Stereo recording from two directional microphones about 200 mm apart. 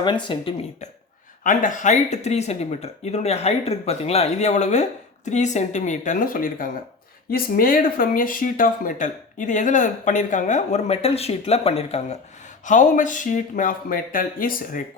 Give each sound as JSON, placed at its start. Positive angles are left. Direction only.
{"t": 0.0, "sound": "speech", "side_deg": 25}
{"t": 1.5, "sound": "speech", "side_deg": 40}